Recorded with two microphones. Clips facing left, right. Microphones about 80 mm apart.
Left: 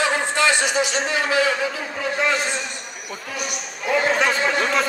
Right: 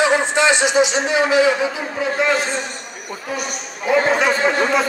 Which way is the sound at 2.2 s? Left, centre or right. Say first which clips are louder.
Right 3 dB; right.